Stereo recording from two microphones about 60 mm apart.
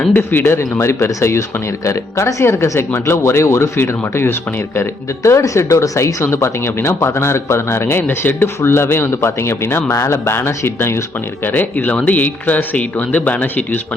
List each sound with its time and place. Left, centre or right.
0.1 s speech: left
4.8 s speech: left
11.4 s speech: left